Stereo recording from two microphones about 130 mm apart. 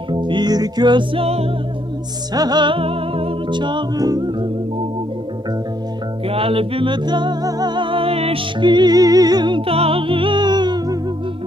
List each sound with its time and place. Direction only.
0.1 s music: 35° right (ahead or behind)
2.3 s music: 30° right (ahead or behind)
6.2 s music: 45° right (ahead or behind)